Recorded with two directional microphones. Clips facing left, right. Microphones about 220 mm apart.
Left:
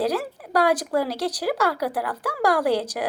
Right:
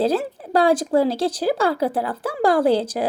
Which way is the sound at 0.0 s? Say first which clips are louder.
Right 4 dB; 25° right (ahead or behind).